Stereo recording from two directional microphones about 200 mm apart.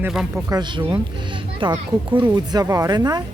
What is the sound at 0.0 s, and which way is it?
Speech, 5° right (ahead or behind).